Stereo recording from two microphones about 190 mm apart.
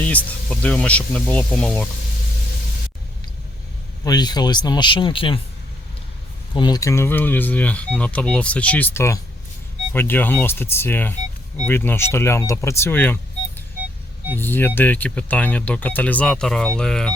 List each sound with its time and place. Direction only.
0.0 s speech: 10° left (ahead or behind)
4.0 s speech: 20° left (ahead or behind)
6.5 s speech: 20° left (ahead or behind)
14.3 s speech: 10° left (ahead or behind)